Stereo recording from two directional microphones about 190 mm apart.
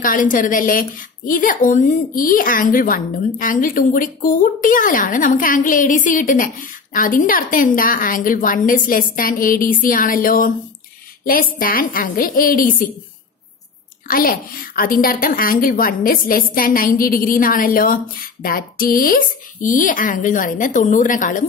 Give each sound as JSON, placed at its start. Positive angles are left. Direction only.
{"t": 0.0, "sound": "a woman's voice", "side_deg": 45}
{"t": 14.0, "sound": "a woman's voice", "side_deg": 50}